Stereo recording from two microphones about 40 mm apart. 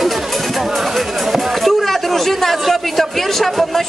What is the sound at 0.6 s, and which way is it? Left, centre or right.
Speech, centre.